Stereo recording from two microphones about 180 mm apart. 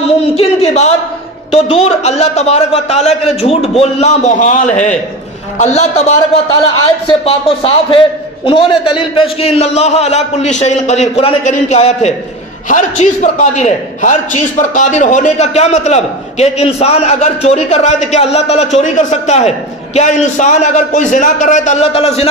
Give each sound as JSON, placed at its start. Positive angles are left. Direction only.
{"t": 0.1, "sound": "a sound", "side_deg": 35}
{"t": 1.5, "sound": "a man's voice", "side_deg": 35}
{"t": 7.1, "sound": "a man's voice", "side_deg": 30}